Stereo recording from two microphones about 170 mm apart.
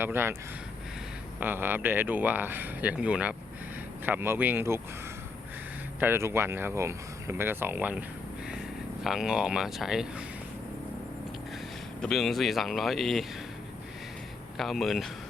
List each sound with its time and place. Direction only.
0.0 s speech: 15° right (ahead or behind)
1.4 s speech: 10° right (ahead or behind)
6.0 s speech: 15° right (ahead or behind)
9.0 s speech: 5° right (ahead or behind)
12.0 s speech: centre (ahead or behind)
14.6 s speech: centre (ahead or behind)